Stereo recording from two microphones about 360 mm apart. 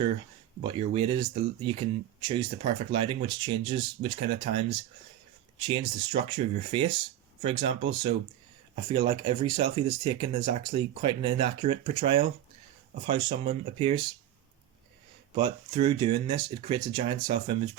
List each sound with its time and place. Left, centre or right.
0.6 s speech: centre
15.4 s speech: centre